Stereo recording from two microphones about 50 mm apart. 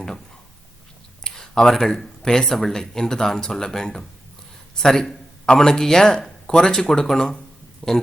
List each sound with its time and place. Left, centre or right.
1.2 s a man's voice: centre
7.8 s speech: left